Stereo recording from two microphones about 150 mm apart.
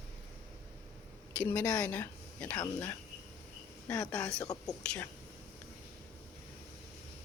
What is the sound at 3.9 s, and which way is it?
Speech, 5° left (ahead or behind).